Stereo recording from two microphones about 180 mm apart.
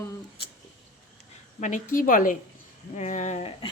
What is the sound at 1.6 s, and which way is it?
A woman's voice, 45° left (ahead or behind).